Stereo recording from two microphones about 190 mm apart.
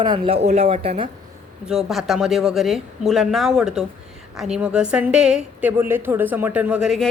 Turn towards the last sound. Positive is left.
turn(degrees=0)  # may be behind; listen again after turning